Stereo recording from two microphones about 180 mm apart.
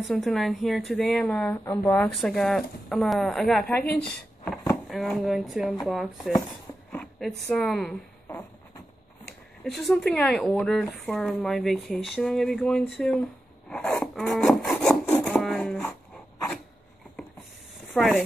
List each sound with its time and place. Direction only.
0.1 s speech: centre (ahead or behind)
2.0 s speech: 5° left (ahead or behind)
3.8 s a woman's voice: 65° left (ahead or behind)
4.8 s speech: centre (ahead or behind)
6.9 s a sound: 5° left (ahead or behind)
7.5 s speech: centre (ahead or behind)
9.7 s speech: centre (ahead or behind)
13.7 s rub: 5° left (ahead or behind)
17.9 s speech: centre (ahead or behind)